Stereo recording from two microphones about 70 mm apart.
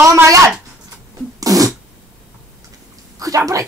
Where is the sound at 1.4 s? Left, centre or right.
Right.